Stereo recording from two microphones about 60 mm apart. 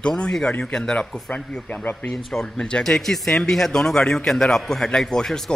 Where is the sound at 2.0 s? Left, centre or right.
Centre.